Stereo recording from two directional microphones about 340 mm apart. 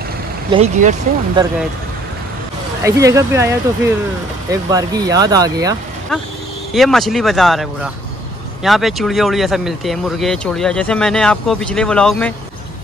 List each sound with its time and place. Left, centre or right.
0.5 s speech: centre
2.8 s speech: centre
4.5 s speech: centre
6.7 s speech: centre